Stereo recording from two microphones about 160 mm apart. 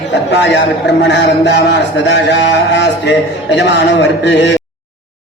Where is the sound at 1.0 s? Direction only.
90° left.